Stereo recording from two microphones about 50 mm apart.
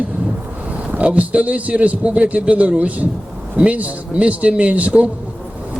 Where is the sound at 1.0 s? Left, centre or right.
Right.